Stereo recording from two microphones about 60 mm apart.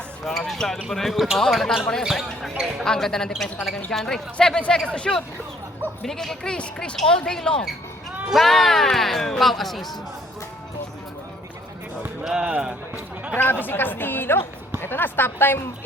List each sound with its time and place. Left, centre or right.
0.3 s speech: centre
2.6 s speech: centre
2.8 s speech: centre
8.3 s speech: centre
12.2 s speech: centre
13.3 s speech: left